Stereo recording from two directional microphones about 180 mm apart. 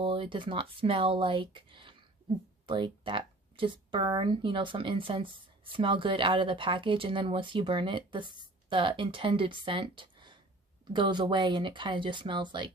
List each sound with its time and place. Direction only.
0.0 s speech: 30° right (ahead or behind)